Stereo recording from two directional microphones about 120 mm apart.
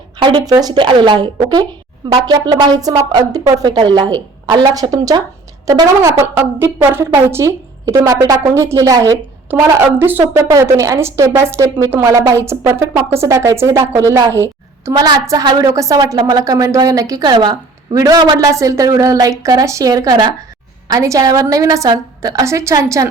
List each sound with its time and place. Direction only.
0.2 s a sound: 45° right (ahead or behind)
0.4 s a woman's voice: 30° right (ahead or behind)
10.0 s a woman's voice: 15° right (ahead or behind)